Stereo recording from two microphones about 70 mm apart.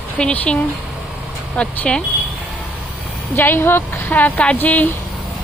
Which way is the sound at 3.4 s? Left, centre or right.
Left.